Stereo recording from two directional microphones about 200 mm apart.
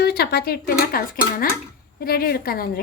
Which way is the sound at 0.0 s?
55° left (ahead or behind).